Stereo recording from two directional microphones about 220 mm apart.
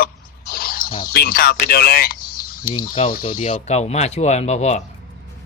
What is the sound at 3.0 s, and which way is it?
Speech, 30° left (ahead or behind).